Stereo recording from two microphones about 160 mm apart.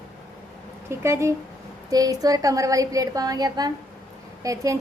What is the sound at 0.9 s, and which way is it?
Speech, 15° right (ahead or behind).